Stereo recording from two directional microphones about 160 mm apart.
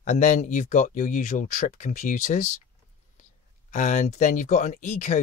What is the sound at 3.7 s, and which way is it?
Speech, 50° left (ahead or behind).